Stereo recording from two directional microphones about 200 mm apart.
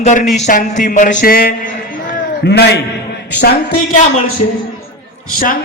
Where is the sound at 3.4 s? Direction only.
50° left (ahead or behind).